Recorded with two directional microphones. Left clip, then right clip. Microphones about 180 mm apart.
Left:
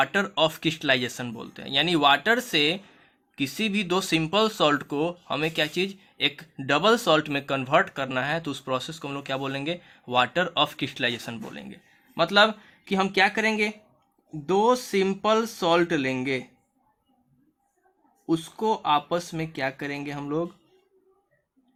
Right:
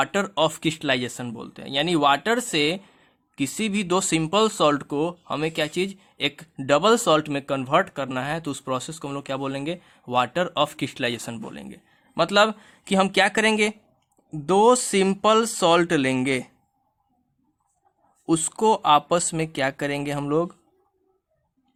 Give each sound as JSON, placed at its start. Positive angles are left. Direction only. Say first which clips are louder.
{"t": 0.0, "sound": "speech", "louder": "right 1 dB", "side_deg": -35}
{"t": 18.3, "sound": "speech", "louder": "right 5 dB", "side_deg": -50}